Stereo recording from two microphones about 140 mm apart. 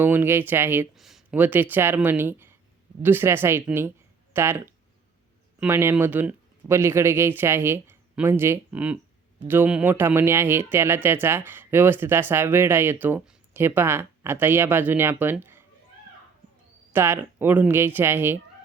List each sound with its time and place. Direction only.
0.0 s speech: 15° right (ahead or behind)
0.9 s a sound: centre (ahead or behind)
1.4 s speech: 10° right (ahead or behind)
16.9 s speech: 15° right (ahead or behind)